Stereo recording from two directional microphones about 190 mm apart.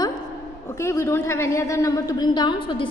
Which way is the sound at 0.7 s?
15° left (ahead or behind).